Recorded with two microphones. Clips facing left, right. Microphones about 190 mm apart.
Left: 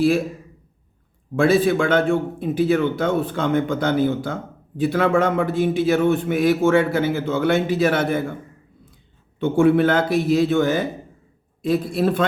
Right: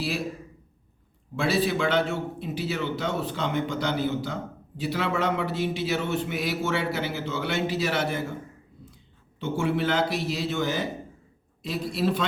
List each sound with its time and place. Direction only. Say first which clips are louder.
1.4 s a man's voice: left 8 dB; 50° left (ahead or behind)
9.4 s a man's voice: left 10 dB; 55° left (ahead or behind)